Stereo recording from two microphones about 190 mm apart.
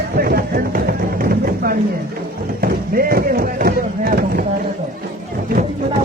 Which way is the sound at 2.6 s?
50° right (ahead or behind).